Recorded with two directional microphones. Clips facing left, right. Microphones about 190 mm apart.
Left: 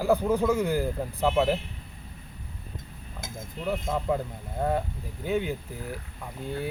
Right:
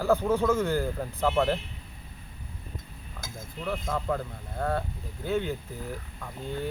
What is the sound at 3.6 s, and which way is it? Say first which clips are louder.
A man's voice: left 2 dB; 15° left (ahead or behind).